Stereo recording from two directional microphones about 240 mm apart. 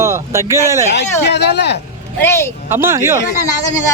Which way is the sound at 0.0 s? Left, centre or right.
Centre.